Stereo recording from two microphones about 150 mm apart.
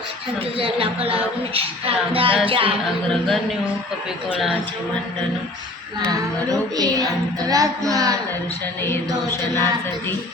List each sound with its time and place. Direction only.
0.6 s music: 40° right (ahead or behind)
4.3 s speech: 5° right (ahead or behind)
6.7 s child singing: 25° right (ahead or behind)
8.9 s music: 15° left (ahead or behind)